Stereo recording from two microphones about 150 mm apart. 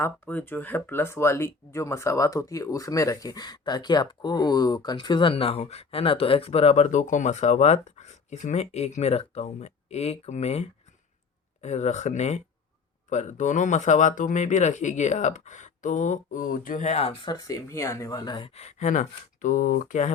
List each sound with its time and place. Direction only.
0.0 s speech: 10° left (ahead or behind); by 17.2 s 45° left (ahead or behind)
17.2 s speech: 25° left (ahead or behind); by 20.1 s 55° left (ahead or behind)